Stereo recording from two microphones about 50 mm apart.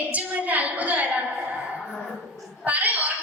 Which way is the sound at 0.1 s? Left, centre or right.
Right.